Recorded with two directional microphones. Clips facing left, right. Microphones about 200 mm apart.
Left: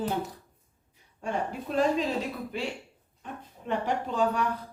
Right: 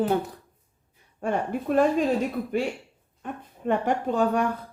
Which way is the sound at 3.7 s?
50° right (ahead or behind).